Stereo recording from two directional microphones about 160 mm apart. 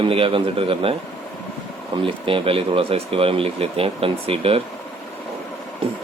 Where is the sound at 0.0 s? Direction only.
35° right (ahead or behind).